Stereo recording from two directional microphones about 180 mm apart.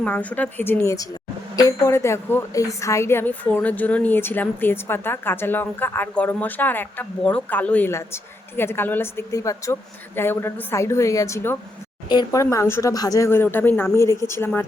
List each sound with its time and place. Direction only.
0.0 s a woman's voice: 10° left (ahead or behind)